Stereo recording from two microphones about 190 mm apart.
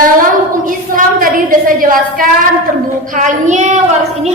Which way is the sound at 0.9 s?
45° right (ahead or behind).